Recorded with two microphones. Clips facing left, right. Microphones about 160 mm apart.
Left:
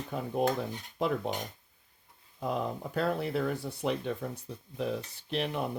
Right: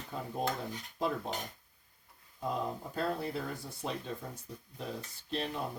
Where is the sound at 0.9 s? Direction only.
70° left (ahead or behind).